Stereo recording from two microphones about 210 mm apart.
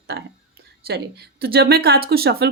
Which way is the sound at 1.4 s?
50° right (ahead or behind).